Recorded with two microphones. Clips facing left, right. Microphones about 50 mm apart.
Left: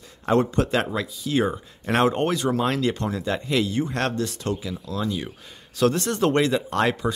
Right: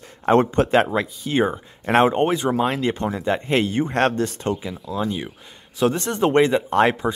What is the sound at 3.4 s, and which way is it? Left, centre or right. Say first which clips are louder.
Speech: right 1 dB; right.